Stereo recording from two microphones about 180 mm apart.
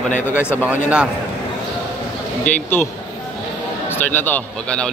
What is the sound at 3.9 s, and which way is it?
Speech, 10° left (ahead or behind).